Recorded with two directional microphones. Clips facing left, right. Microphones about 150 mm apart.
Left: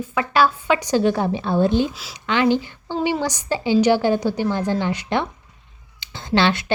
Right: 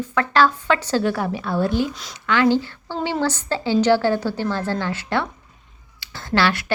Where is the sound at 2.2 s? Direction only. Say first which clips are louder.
Right 1 dB; 20° left (ahead or behind).